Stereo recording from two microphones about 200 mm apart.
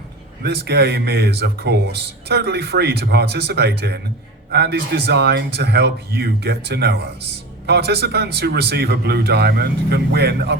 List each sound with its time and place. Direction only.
0.4 s speech: 55° right (ahead or behind)